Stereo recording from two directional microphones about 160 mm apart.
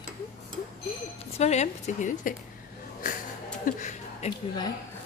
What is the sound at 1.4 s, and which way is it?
Speech, 45° left (ahead or behind).